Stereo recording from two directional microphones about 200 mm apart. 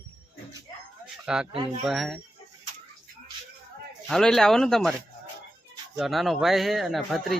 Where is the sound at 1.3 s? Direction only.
5° right (ahead or behind).